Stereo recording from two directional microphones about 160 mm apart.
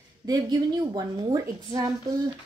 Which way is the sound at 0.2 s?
25° right (ahead or behind).